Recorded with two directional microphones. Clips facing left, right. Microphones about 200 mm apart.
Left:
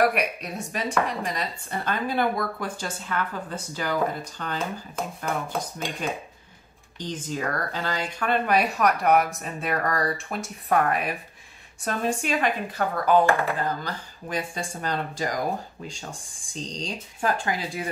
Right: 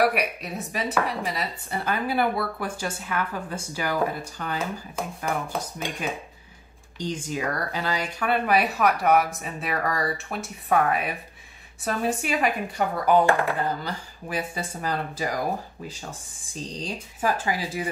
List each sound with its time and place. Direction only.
0.0 s speech: centre (ahead or behind)
7.0 s speech: 10° right (ahead or behind)